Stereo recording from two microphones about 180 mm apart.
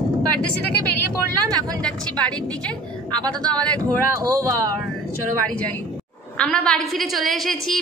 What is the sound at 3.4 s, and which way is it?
Speech, 5° left (ahead or behind).